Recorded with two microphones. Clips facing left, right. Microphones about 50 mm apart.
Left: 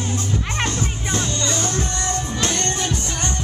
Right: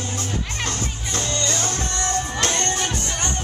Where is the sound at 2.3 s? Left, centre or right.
Right.